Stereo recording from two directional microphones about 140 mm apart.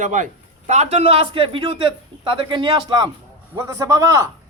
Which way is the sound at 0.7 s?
50° right (ahead or behind).